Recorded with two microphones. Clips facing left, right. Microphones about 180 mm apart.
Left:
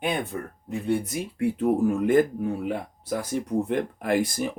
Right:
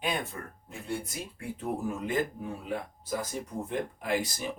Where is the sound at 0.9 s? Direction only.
65° left (ahead or behind).